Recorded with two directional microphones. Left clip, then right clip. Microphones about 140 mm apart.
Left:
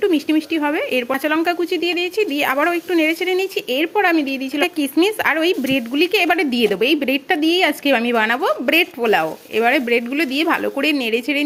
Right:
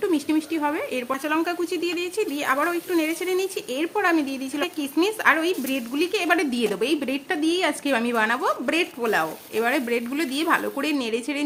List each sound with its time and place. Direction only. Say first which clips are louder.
0.0 s speech: left 6 dB; 25° left (ahead or behind)
4.6 s speech: left 7 dB; 35° left (ahead or behind)